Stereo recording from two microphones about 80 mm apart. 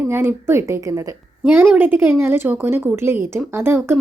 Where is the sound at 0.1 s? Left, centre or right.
Right.